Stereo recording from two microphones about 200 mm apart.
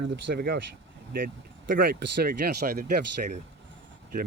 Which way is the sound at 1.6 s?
50° right (ahead or behind).